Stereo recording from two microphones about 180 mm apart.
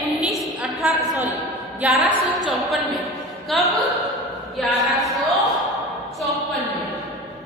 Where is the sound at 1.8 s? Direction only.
5° right (ahead or behind).